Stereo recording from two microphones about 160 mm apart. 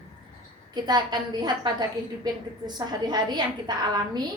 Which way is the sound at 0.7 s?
25° right (ahead or behind).